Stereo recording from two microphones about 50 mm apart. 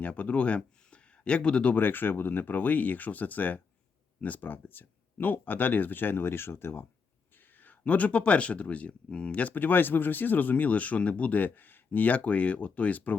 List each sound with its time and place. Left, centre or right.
0.0 s speech: left
1.7 s speech: left
7.3 s speech: left